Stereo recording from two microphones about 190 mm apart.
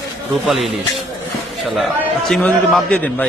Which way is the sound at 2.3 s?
5° left (ahead or behind).